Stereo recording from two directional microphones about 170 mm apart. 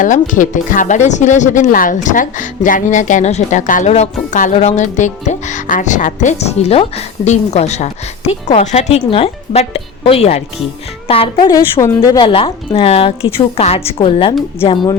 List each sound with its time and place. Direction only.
0.0 s a woman's voice: 50° left (ahead or behind); by 12.3 s 20° left (ahead or behind)
12.3 s a woman's voice: 35° left (ahead or behind)